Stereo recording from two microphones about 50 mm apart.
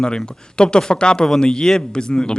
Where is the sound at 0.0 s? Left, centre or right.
Centre.